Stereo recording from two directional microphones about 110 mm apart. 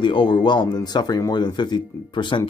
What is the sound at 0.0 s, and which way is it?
Speech, 45° left (ahead or behind).